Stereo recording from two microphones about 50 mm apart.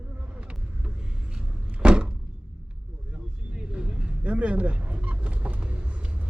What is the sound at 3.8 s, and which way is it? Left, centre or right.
Vehicle, right.